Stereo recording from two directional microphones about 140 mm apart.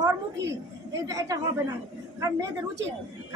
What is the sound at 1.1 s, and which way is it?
Speech, 25° right (ahead or behind).